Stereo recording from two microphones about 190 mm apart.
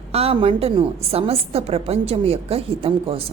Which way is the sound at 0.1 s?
30° right (ahead or behind).